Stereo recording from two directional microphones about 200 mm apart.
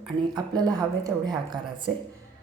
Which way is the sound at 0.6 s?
20° right (ahead or behind).